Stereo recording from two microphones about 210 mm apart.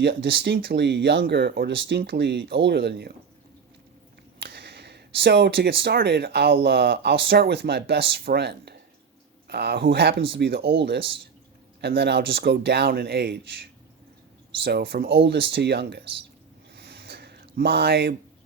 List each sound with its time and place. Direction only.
0.0 s speech: 60° right (ahead or behind)
4.4 s speech: 55° right (ahead or behind)
14.6 s speech: 50° right (ahead or behind)
16.7 s a sound: 50° right (ahead or behind)